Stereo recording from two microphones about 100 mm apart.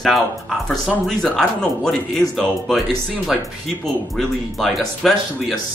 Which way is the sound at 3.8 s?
5° left (ahead or behind).